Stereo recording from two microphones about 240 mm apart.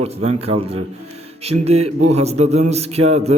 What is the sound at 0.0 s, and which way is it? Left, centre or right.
A man's voice, right.